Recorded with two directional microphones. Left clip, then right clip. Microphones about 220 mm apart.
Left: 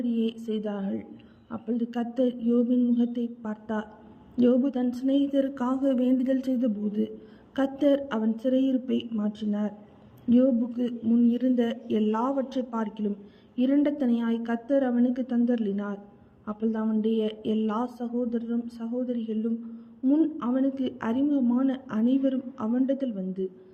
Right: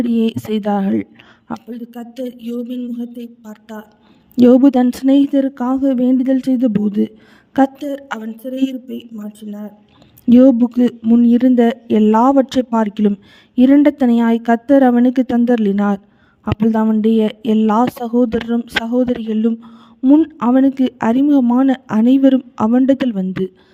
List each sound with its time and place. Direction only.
0.0 s speech: 50° right (ahead or behind)
1.6 s speech: centre (ahead or behind)
4.4 s speech: 55° right (ahead or behind)
8.2 s speech: centre (ahead or behind)
10.2 s speech: 55° right (ahead or behind)